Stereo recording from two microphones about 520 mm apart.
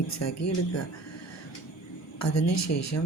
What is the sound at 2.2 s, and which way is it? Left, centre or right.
Speech, left.